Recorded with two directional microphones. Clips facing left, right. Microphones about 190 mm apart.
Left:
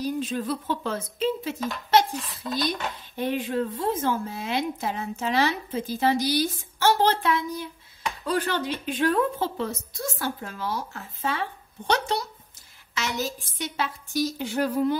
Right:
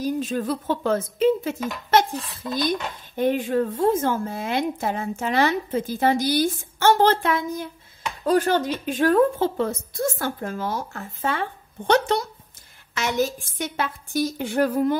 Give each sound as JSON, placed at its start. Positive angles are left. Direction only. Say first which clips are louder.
{"t": 0.0, "sound": "a woman's voice", "louder": "right 3 dB", "side_deg": -45}
{"t": 3.2, "sound": "a woman's voice", "louder": "right 5 dB", "side_deg": -50}